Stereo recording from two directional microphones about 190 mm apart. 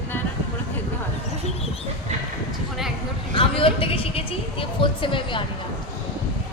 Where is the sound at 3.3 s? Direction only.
30° left (ahead or behind).